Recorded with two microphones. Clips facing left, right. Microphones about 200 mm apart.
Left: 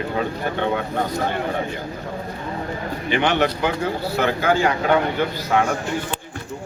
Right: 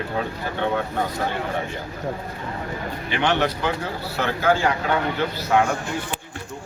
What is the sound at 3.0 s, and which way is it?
A man's voice, 15° left (ahead or behind).